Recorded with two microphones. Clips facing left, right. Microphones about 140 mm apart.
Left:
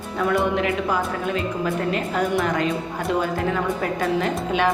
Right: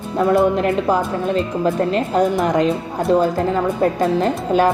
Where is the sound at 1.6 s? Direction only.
35° right (ahead or behind).